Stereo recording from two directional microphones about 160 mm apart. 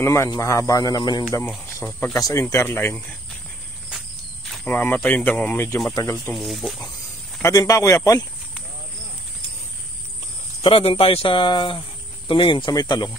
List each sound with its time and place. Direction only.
0.0 s speech: 15° left (ahead or behind)
4.6 s speech: 10° left (ahead or behind)
6.3 s speech: centre (ahead or behind)
7.4 s speech: 20° left (ahead or behind)
10.6 s speech: 35° left (ahead or behind)